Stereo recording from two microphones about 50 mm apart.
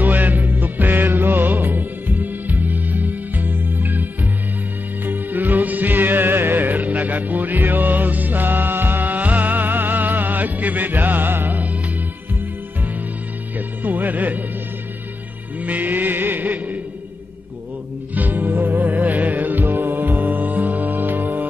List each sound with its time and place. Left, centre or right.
0.0 s music: right
13.6 s music: right
15.6 s music: right
18.1 s music: right